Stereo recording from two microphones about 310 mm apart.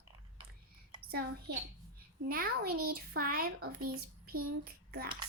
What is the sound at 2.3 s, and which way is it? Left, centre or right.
A child's voice, right.